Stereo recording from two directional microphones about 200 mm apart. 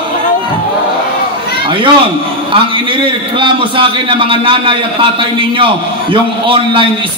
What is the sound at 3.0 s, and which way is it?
A man's voice, 25° right (ahead or behind).